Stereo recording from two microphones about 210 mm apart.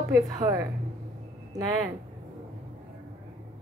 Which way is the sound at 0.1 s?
15° right (ahead or behind).